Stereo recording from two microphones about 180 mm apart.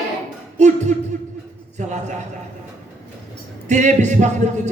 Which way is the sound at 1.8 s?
40° right (ahead or behind).